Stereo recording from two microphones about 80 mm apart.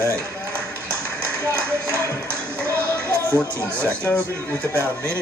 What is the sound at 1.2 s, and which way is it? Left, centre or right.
Speech, right.